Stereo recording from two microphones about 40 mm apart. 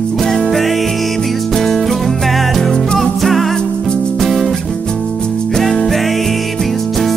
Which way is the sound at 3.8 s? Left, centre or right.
Left.